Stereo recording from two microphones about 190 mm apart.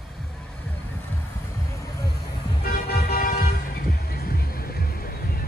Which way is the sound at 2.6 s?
55° left (ahead or behind).